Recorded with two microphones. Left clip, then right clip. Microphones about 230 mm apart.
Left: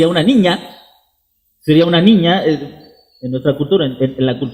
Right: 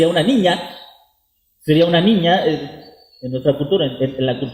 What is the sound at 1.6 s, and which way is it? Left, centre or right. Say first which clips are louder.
A man's voice: left 3 dB; left.